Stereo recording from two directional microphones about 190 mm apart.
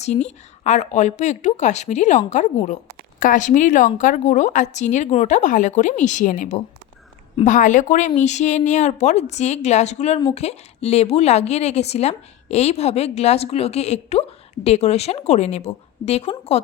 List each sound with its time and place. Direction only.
0.0 s a woman's voice: 35° left (ahead or behind)